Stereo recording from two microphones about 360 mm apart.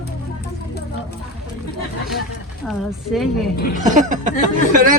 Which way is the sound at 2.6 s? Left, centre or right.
Centre.